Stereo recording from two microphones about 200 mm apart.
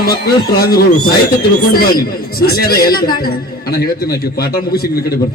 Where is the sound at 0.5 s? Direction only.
50° left (ahead or behind).